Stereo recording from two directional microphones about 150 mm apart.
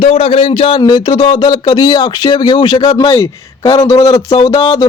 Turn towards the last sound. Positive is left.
turn(degrees=25)  # may be behind; listen again after turning